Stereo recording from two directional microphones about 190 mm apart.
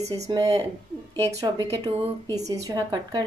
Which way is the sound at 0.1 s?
20° right (ahead or behind).